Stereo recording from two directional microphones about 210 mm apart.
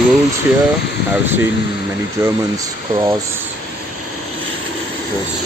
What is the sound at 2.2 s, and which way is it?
Speech, 10° right (ahead or behind).